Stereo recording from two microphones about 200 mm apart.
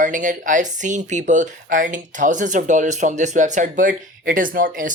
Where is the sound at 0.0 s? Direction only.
40° right (ahead or behind).